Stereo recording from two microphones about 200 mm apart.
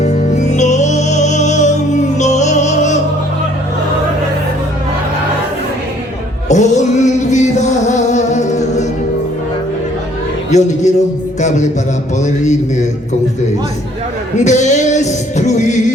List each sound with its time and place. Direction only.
0.0 s music: 35° left (ahead or behind)
6.5 s music: 35° left (ahead or behind)
10.5 s music: 35° left (ahead or behind)
14.3 s music: 35° left (ahead or behind)